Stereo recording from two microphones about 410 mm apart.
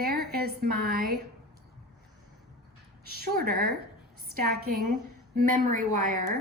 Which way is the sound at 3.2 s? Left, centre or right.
Right.